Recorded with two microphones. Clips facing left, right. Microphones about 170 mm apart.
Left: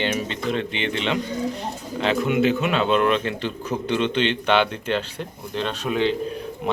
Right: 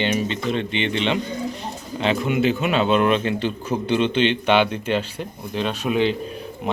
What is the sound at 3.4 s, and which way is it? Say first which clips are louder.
Speech: right 3 dB; 30° right (ahead or behind).